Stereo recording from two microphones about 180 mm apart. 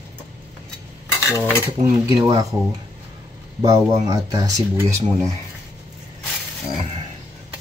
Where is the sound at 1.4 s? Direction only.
15° right (ahead or behind).